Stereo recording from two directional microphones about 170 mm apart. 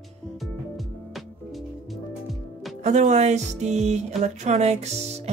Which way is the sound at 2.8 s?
45° right (ahead or behind).